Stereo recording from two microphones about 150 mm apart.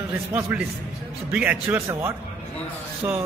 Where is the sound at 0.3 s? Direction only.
10° right (ahead or behind).